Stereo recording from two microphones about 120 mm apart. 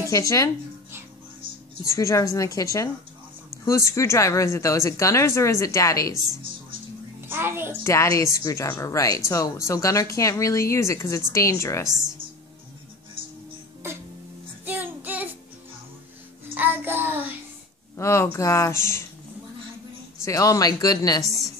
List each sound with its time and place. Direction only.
0.1 s speech: 25° left (ahead or behind)
1.9 s speech: 25° left (ahead or behind)
7.2 s a child's voice: 20° right (ahead or behind)
7.8 s speech: 25° left (ahead or behind)
14.7 s child singing: 15° right (ahead or behind)
16.5 s child singing: 15° right (ahead or behind)
17.9 s speech: 25° left (ahead or behind)
20.2 s speech: 25° left (ahead or behind)
21.2 s a woman's voice: centre (ahead or behind)